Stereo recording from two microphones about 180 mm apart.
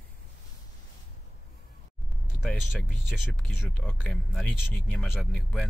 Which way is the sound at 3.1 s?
Centre (ahead or behind).